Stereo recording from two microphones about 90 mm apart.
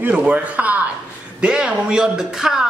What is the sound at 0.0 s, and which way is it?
A man's voice, 15° right (ahead or behind).